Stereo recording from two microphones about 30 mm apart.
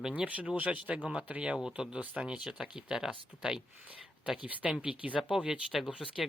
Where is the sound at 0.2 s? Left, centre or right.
Right.